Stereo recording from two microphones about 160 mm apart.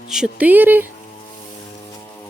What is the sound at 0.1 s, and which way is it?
Speech, 5° right (ahead or behind).